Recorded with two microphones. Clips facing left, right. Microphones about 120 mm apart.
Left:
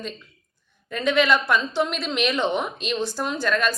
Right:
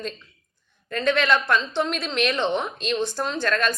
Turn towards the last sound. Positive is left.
turn(degrees=5)  # may be behind; listen again after turning